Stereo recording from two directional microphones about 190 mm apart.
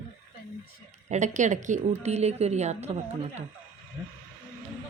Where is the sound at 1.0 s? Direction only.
40° right (ahead or behind).